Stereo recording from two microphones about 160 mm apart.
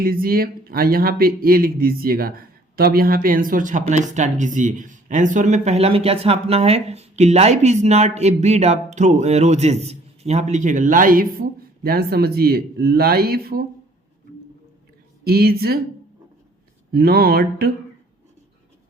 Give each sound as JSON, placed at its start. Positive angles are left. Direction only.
{"t": 0.0, "sound": "speech", "side_deg": -65}
{"t": 15.2, "sound": "mantra", "side_deg": -75}
{"t": 16.9, "sound": "mantra", "side_deg": -75}